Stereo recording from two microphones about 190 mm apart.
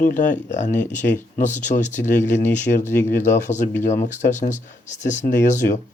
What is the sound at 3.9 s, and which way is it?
Speech, 40° left (ahead or behind).